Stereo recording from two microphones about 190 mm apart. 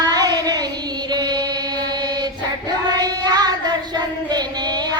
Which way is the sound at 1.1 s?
20° right (ahead or behind).